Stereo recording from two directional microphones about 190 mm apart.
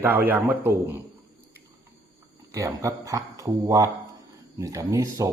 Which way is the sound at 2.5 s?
15° right (ahead or behind).